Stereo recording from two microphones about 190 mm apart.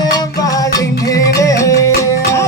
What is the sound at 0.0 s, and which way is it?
Music, 20° left (ahead or behind).